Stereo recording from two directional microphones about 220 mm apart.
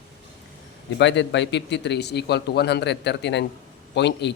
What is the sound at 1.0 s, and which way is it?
Speech, 55° left (ahead or behind).